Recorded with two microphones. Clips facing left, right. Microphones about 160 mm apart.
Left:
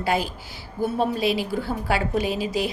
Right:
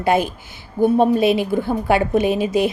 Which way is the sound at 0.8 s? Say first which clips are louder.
Right 9 dB; 55° right (ahead or behind).